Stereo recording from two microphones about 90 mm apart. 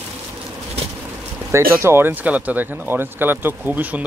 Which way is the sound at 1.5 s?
30° right (ahead or behind).